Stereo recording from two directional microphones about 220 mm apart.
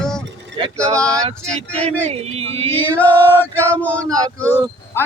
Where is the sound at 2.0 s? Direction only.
30° right (ahead or behind).